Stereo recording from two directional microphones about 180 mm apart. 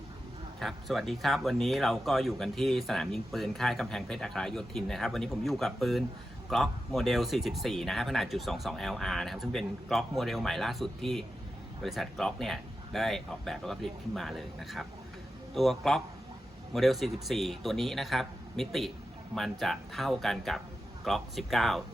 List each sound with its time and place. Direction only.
0.6 s speech: centre (ahead or behind)